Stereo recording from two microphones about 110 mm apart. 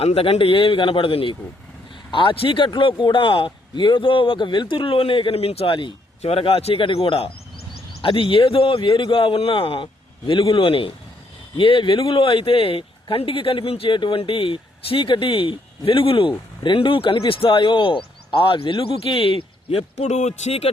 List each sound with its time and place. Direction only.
0.0 s speech: 65° left (ahead or behind)
6.2 s speech: 60° left (ahead or behind); by 20.7 s 80° left